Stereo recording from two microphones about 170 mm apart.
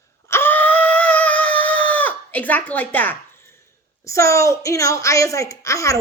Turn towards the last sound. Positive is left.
turn(degrees=20)  # may be behind; listen again after turning